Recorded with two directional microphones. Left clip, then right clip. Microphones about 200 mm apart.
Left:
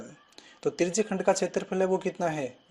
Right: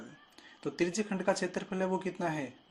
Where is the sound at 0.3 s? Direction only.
30° left (ahead or behind).